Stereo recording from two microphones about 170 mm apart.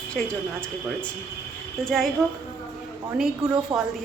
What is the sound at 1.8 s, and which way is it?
Speech, centre (ahead or behind).